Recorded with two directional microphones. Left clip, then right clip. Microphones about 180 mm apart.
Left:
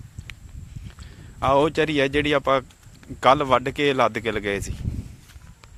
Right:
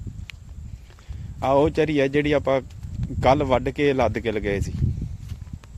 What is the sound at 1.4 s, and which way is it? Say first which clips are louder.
Speech: even; 10° right (ahead or behind).